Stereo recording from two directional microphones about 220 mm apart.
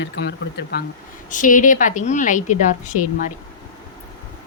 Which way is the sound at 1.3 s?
35° left (ahead or behind).